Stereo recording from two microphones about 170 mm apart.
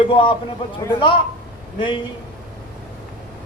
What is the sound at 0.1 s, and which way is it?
Speech, 30° left (ahead or behind).